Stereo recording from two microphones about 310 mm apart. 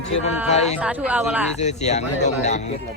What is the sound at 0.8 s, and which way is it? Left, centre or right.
Speech, centre.